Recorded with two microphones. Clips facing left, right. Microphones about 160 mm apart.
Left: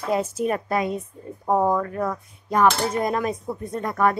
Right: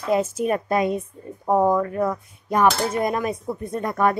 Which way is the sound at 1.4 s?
5° right (ahead or behind).